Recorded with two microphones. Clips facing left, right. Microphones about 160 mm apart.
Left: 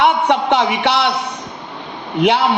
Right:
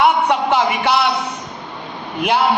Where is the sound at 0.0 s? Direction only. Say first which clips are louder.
Left 1 dB; 60° left (ahead or behind).